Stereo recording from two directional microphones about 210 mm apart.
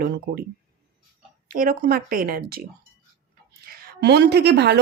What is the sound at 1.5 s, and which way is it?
A woman's voice, 45° right (ahead or behind).